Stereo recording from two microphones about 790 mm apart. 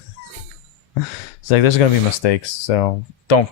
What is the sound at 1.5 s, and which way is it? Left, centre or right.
Speech, left.